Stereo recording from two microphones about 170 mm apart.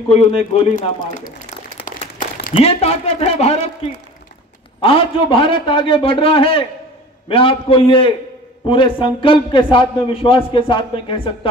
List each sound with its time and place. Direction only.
0.1 s a man's voice: 40° left (ahead or behind)
2.5 s a man's voice: 35° left (ahead or behind)
4.8 s a man's voice: 30° left (ahead or behind)